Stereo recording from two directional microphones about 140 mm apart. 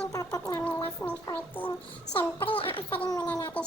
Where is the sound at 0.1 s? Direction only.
25° left (ahead or behind).